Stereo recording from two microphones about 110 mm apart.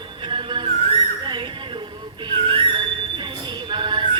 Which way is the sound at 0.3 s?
45° right (ahead or behind).